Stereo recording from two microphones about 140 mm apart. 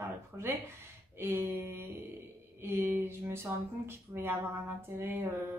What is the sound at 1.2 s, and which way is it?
A woman's voice, 20° right (ahead or behind).